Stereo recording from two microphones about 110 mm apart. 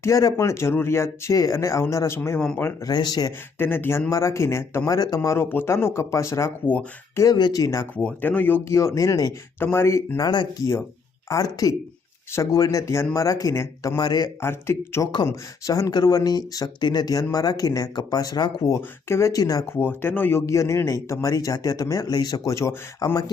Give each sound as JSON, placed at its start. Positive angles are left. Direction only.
{"t": 0.0, "sound": "speech", "side_deg": 30}
{"t": 2.8, "sound": "speech", "side_deg": 40}
{"t": 3.6, "sound": "speech", "side_deg": 20}
{"t": 7.2, "sound": "speech", "side_deg": 35}
{"t": 7.9, "sound": "speech", "side_deg": 15}
{"t": 9.6, "sound": "speech", "side_deg": 25}
{"t": 10.2, "sound": "speech", "side_deg": 40}
{"t": 14.4, "sound": "speech", "side_deg": 25}
{"t": 18.8, "sound": "speech", "side_deg": 25}
{"t": 19.7, "sound": "speech", "side_deg": 20}